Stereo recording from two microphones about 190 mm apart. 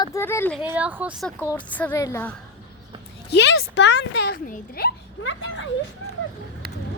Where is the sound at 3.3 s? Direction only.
65° left (ahead or behind).